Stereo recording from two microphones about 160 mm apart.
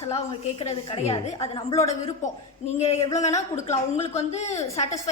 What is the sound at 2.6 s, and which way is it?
Speech, 40° left (ahead or behind).